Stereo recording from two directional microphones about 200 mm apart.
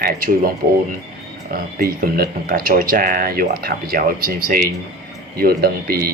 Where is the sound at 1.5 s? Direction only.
45° right (ahead or behind).